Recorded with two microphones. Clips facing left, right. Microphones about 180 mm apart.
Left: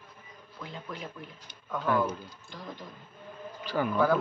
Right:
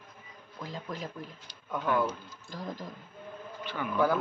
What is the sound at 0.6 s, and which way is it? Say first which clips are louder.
Speech: right 2 dB; 40° right (ahead or behind).